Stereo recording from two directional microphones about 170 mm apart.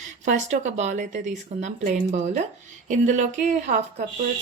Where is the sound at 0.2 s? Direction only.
45° right (ahead or behind).